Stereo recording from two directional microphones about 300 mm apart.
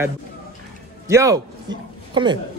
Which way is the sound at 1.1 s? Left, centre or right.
Centre.